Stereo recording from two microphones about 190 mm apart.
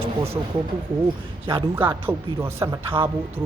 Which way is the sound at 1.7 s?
10° right (ahead or behind).